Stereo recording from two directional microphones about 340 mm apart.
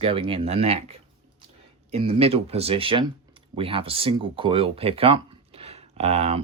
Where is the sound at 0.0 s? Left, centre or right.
Centre.